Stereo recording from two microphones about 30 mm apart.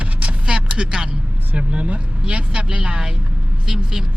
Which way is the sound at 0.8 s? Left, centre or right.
Centre.